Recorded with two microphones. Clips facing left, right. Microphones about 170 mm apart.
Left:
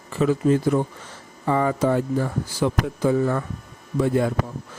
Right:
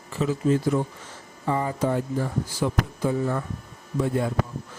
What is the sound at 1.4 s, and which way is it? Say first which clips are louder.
Speech: left 4 dB; 90° left.